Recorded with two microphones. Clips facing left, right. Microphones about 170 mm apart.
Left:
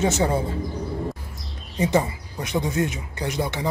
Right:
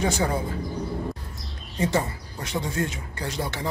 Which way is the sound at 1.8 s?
15° left (ahead or behind).